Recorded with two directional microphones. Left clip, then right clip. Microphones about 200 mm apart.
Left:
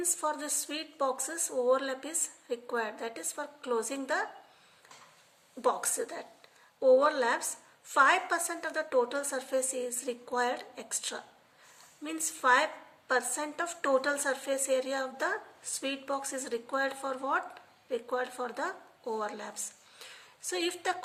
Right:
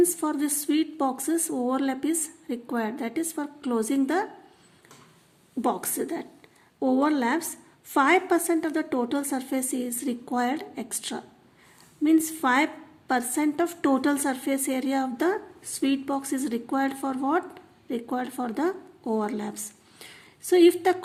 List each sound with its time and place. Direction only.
0.0 s a woman's voice: 30° right (ahead or behind)
5.6 s a woman's voice: 30° right (ahead or behind)